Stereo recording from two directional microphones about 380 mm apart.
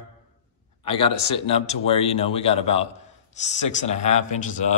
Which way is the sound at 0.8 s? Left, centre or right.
Centre.